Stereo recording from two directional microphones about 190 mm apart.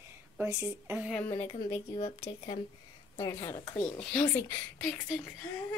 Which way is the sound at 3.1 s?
20° left (ahead or behind).